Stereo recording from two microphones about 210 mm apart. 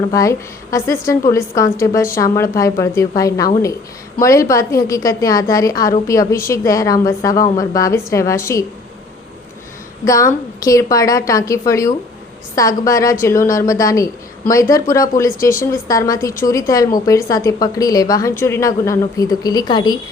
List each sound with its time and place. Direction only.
0.1 s a woman's voice: 15° left (ahead or behind)
10.1 s a woman's voice: 15° left (ahead or behind)